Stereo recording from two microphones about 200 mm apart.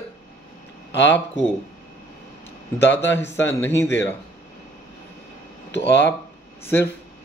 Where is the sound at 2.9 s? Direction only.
10° left (ahead or behind).